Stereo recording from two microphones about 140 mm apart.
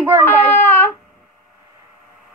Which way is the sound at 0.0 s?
15° right (ahead or behind).